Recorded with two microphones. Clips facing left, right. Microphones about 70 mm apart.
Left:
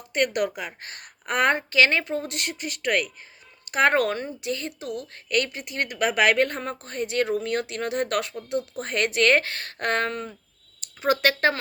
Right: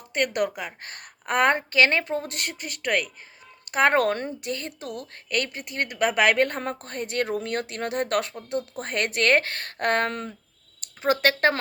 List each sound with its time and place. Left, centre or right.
0.1 s a woman's voice: right